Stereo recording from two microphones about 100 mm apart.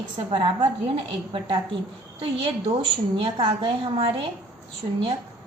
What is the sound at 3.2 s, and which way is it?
A woman's voice, 50° right (ahead or behind).